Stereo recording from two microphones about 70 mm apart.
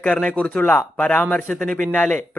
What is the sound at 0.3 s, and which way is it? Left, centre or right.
Speech, centre.